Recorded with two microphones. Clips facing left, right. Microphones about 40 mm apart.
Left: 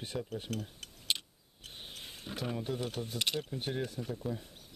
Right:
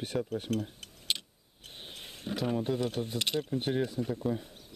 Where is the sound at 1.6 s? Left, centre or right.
Right.